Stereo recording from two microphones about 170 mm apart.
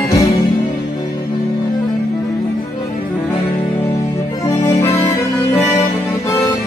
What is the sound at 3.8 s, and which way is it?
Music, 20° left (ahead or behind).